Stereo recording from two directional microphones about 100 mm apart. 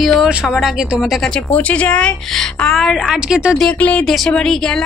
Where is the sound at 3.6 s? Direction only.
15° left (ahead or behind).